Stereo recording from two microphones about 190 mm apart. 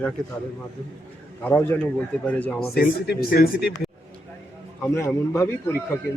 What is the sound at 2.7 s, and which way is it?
Speech, 55° left (ahead or behind).